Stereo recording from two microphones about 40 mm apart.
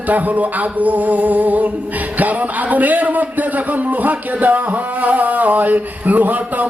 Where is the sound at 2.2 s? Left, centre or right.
Right.